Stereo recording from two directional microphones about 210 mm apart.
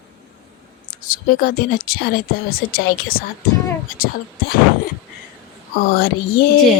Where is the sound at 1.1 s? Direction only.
45° left (ahead or behind).